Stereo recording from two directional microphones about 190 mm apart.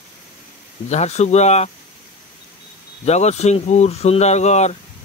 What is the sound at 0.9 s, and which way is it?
Speech, 35° left (ahead or behind).